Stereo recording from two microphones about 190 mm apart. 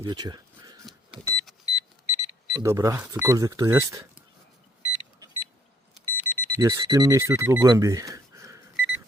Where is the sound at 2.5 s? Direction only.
15° right (ahead or behind).